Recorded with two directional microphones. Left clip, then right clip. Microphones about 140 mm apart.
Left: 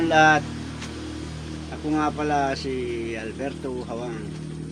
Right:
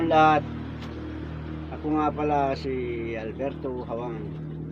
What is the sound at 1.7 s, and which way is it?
Speech, 15° left (ahead or behind).